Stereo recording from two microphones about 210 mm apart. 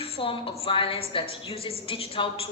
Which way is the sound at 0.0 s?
25° left (ahead or behind).